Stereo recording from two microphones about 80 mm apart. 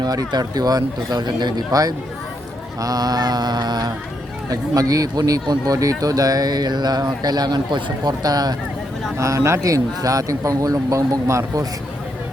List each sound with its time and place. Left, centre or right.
0.0 s speech: right
9.1 s speech: right